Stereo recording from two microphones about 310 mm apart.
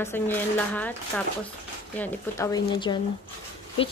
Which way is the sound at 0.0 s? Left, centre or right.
Centre.